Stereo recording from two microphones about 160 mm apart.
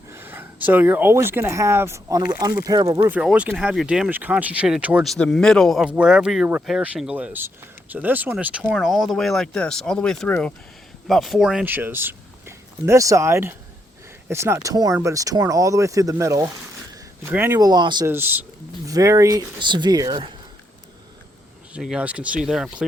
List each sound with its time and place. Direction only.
0.1 s speech: 15° right (ahead or behind)
3.2 s speech: 5° right (ahead or behind)
5.0 s speech: centre (ahead or behind); by 17.7 s 15° right (ahead or behind)
17.7 s speech: 25° right (ahead or behind)
18.1 s speech: 10° right (ahead or behind)
21.7 s speech: 5° right (ahead or behind)